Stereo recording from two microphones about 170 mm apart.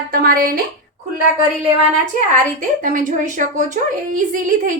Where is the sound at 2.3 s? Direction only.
50° right (ahead or behind).